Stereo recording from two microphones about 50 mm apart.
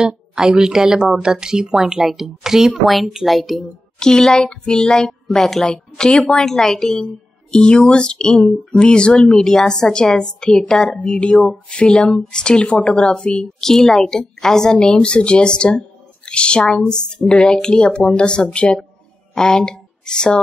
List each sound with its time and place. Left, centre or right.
0.0 s a woman's voice: centre
4.0 s speech: centre
7.5 s speech: centre
9.3 s speech: centre
13.6 s speech: centre